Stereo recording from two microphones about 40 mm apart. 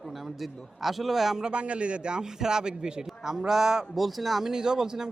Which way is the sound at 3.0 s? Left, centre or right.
Centre.